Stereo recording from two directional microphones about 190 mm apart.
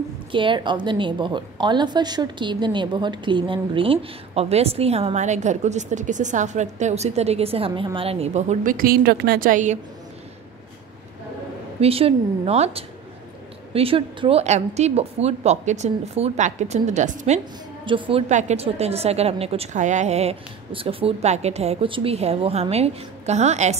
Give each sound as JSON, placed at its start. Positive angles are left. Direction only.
{"t": 0.3, "sound": "a woman's voice", "side_deg": -25}
{"t": 11.8, "sound": "a woman's voice", "side_deg": -30}
{"t": 17.8, "sound": "a woman's voice", "side_deg": -25}